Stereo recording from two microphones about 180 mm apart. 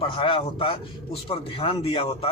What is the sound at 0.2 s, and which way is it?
Speech, 30° left (ahead or behind).